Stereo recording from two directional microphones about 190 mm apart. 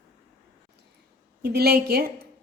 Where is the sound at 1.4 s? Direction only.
55° right (ahead or behind).